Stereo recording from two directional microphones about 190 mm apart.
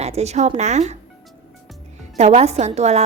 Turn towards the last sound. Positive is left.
turn(degrees=-35)  # may be behind; listen again after turning